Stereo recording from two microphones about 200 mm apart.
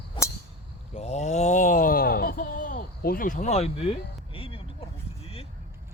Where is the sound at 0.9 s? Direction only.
35° left (ahead or behind).